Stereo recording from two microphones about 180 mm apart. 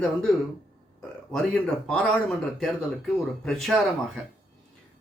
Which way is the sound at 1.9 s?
Centre (ahead or behind).